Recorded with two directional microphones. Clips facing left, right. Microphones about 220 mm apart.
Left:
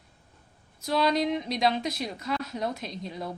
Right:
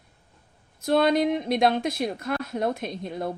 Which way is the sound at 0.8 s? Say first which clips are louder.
Right 5 dB; 55° right (ahead or behind).